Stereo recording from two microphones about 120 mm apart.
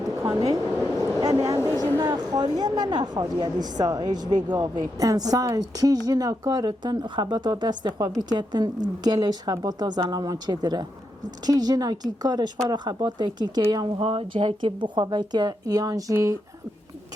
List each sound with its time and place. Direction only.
0.2 s a sound: 30° right (ahead or behind)
2.0 s a woman's voice: 35° right (ahead or behind)
14.0 s a woman's voice: 50° right (ahead or behind); by 16.4 s 30° right (ahead or behind)